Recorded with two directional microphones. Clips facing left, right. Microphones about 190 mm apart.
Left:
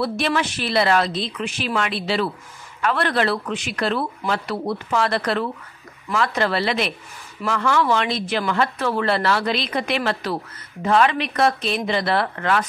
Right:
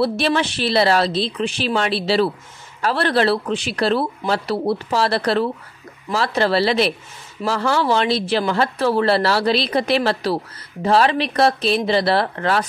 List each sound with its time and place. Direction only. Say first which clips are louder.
0.0 s speech: right 3 dB; 30° right (ahead or behind)